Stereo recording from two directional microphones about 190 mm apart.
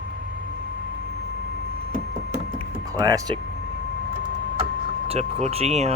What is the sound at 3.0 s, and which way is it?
Speech, 20° right (ahead or behind).